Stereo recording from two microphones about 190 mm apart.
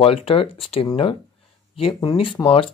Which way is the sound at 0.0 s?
30° left (ahead or behind).